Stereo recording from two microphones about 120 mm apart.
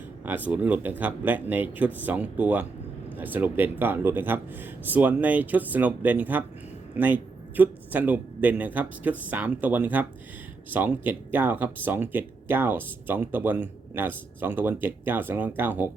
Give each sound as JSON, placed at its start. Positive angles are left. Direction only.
{"t": 0.3, "sound": "speech", "side_deg": -15}